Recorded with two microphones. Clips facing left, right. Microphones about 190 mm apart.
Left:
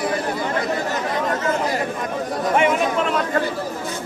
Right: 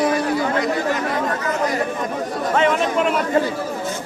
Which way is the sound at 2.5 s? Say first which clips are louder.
Even; 10° left (ahead or behind).